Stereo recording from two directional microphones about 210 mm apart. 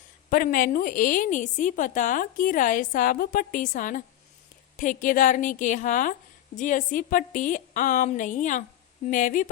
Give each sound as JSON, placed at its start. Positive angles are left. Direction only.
{"t": 0.3, "sound": "a woman's voice", "side_deg": 40}